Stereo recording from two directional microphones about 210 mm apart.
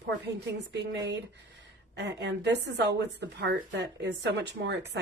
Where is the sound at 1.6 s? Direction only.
55° right (ahead or behind).